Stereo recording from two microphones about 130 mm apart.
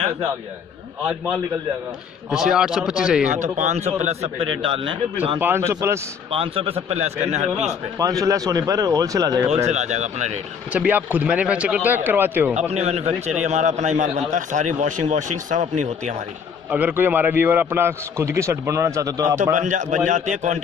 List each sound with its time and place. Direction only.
2.3 s speech: 5° right (ahead or behind)
3.3 s a man's voice: 70° right (ahead or behind)
4.6 s a man's voice: 45° right (ahead or behind)
5.4 s a man's voice: 20° right (ahead or behind)
6.3 s a man's voice: 45° right (ahead or behind); by 7.4 s 60° right (ahead or behind)
8.0 s a man's voice: 25° right (ahead or behind)
9.7 s a man's voice: 65° right (ahead or behind)
10.7 s a man's voice: 10° right (ahead or behind)
12.5 s a man's voice: 55° right (ahead or behind)
16.7 s a man's voice: 15° right (ahead or behind)
19.5 s speech: 70° right (ahead or behind)